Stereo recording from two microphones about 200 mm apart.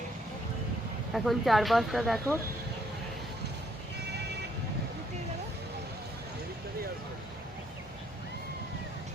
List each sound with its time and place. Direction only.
1.1 s speech: centre (ahead or behind)
4.0 s vehicle: 55° right (ahead or behind)